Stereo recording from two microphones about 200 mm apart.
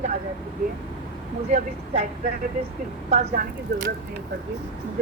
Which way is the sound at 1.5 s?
40° right (ahead or behind).